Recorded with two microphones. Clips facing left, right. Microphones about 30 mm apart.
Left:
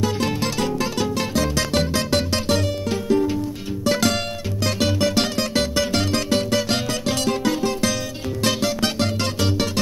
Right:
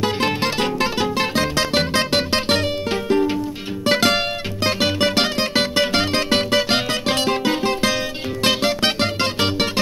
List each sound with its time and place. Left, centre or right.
0.0 s music: right